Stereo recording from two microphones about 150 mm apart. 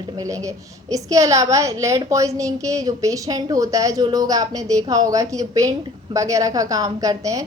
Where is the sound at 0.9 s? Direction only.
20° right (ahead or behind).